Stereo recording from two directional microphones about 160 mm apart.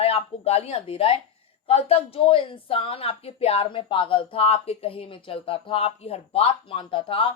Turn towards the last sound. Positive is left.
turn(degrees=35)  # may be behind; listen again after turning